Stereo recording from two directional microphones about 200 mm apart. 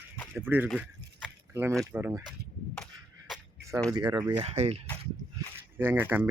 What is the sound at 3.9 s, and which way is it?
Speech, 20° right (ahead or behind).